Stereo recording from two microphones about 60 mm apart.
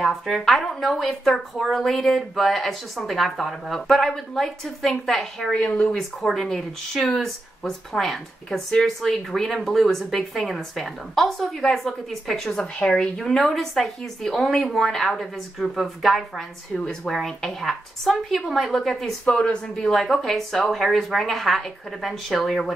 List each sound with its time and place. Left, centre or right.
0.0 s speech: centre
5.5 s speech: centre
5.9 s speech: centre
16.7 s speech: centre
17.1 s speech: centre
19.2 s speech: centre